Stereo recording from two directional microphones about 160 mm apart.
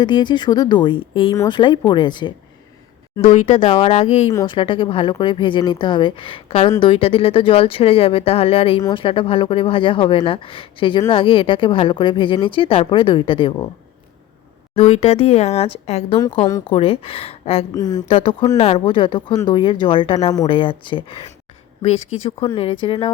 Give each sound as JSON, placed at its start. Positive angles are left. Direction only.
{"t": 0.0, "sound": "speech", "side_deg": 30}
{"t": 3.6, "sound": "speech", "side_deg": 35}
{"t": 14.8, "sound": "speech", "side_deg": 45}
{"t": 16.1, "sound": "speech", "side_deg": 30}
{"t": 17.7, "sound": "speech", "side_deg": 25}
{"t": 18.5, "sound": "speech", "side_deg": 45}
{"t": 18.9, "sound": "speech", "side_deg": 30}